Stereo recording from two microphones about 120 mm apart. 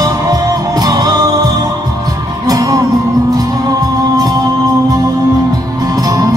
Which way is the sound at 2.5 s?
30° right (ahead or behind).